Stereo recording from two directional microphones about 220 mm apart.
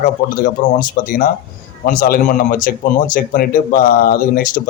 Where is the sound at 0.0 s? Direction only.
35° left (ahead or behind).